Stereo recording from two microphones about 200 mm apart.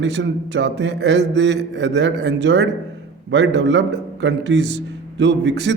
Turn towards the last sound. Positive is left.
turn(degrees=-60)  # may be behind; listen again after turning